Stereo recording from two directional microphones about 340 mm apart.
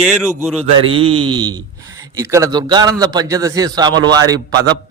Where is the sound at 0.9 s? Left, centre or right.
Centre.